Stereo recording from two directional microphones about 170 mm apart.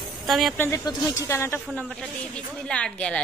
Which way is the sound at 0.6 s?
15° left (ahead or behind).